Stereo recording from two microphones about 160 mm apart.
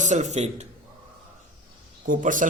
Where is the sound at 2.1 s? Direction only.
55° right (ahead or behind).